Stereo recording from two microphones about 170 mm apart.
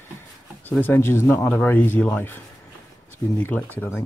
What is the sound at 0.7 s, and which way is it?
A man's voice, 10° left (ahead or behind).